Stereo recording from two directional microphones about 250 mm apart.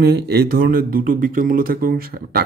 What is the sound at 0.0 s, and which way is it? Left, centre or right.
Speech, right.